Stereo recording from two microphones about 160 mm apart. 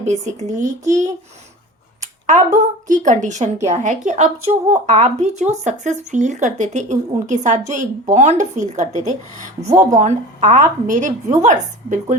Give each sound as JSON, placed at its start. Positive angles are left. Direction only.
{"t": 0.0, "sound": "a woman's voice", "side_deg": -45}
{"t": 2.6, "sound": "a woman's voice", "side_deg": -50}